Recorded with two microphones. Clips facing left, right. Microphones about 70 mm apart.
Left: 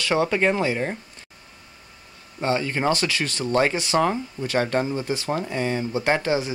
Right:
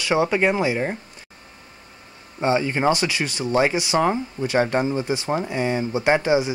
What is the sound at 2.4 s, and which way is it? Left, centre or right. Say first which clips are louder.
Speech: right 3 dB; centre.